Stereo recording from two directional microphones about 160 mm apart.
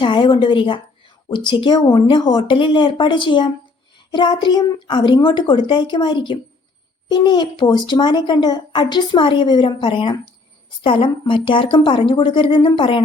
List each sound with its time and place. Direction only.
0.0 s a woman's voice: 30° left (ahead or behind)